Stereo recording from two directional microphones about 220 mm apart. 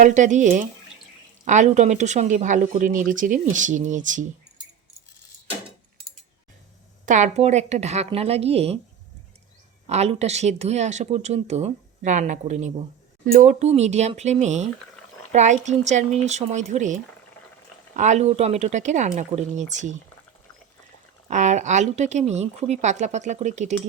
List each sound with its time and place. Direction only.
0.0 s speech: 35° right (ahead or behind)
7.0 s a woman's voice: 35° right (ahead or behind)
9.8 s speech: 30° right (ahead or behind)
21.2 s speech: 35° right (ahead or behind)